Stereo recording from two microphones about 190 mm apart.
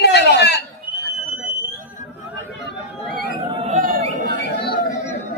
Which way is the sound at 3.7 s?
45° right (ahead or behind).